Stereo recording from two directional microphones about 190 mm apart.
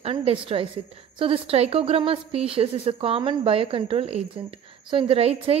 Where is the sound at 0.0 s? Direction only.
30° right (ahead or behind).